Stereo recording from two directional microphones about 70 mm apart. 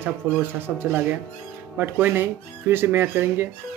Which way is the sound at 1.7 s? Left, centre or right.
Right.